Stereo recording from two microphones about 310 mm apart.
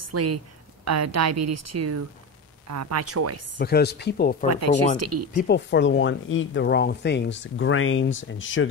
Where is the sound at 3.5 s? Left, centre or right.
Left.